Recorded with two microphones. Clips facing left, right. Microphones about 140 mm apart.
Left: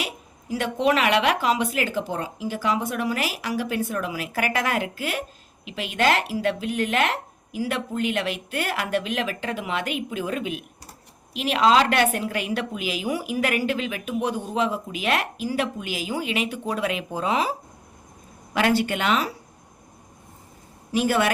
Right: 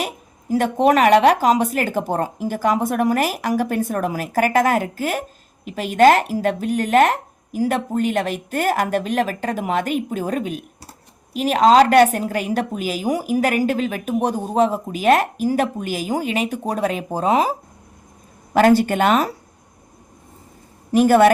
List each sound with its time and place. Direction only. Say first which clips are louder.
0.0 s a woman's voice: right 5 dB; 45° right (ahead or behind)
20.9 s speech: right 9 dB; 50° right (ahead or behind)